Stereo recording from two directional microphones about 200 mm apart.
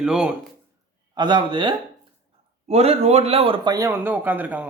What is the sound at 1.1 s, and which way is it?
A man's voice, 20° right (ahead or behind).